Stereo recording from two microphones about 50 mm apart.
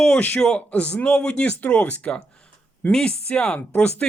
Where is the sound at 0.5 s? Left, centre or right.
Left.